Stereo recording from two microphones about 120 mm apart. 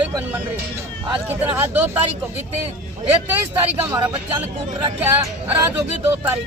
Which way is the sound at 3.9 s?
35° right (ahead or behind).